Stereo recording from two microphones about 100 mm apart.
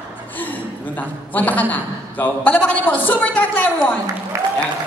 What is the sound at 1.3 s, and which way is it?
A man's voice, 15° left (ahead or behind).